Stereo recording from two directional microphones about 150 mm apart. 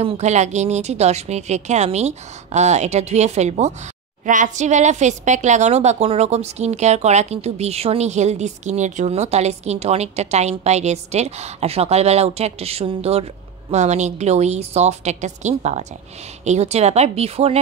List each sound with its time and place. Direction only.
0.0 s a woman's voice: 45° right (ahead or behind)